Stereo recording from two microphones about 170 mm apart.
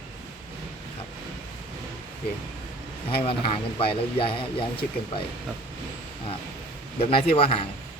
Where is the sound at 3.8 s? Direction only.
30° left (ahead or behind).